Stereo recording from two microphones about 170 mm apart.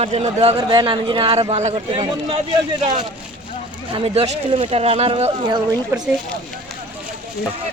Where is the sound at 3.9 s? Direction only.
35° right (ahead or behind).